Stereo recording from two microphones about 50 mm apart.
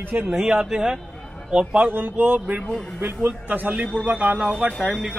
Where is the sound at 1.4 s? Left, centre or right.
Right.